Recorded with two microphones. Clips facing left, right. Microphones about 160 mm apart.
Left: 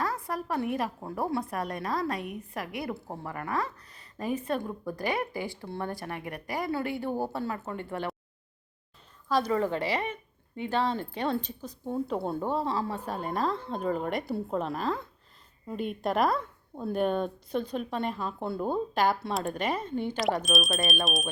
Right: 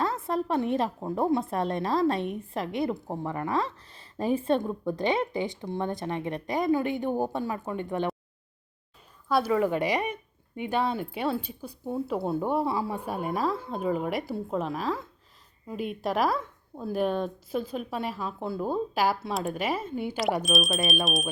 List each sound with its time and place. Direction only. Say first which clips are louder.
0.0 s a woman's voice: right 4 dB; 25° right (ahead or behind)
9.3 s a woman's voice: right 2 dB; 10° right (ahead or behind)